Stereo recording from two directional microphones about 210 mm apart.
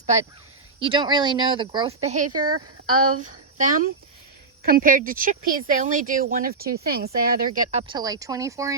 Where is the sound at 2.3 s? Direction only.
90° right.